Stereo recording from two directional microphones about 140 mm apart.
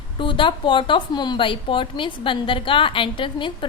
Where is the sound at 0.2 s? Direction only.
35° left (ahead or behind).